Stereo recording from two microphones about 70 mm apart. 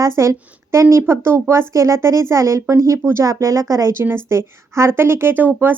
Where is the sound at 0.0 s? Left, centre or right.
Right.